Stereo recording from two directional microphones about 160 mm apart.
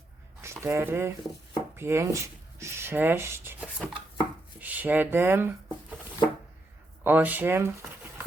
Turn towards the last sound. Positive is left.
turn(degrees=-15)  # may be behind; listen again after turning